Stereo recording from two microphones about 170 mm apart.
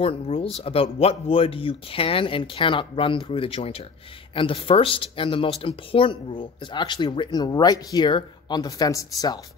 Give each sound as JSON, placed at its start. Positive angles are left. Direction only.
{"t": 0.0, "sound": "speech", "side_deg": 35}